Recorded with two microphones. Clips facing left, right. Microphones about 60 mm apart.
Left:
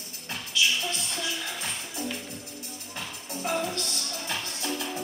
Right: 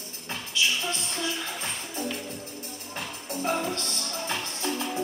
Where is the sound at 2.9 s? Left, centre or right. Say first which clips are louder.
Right 3 dB; right.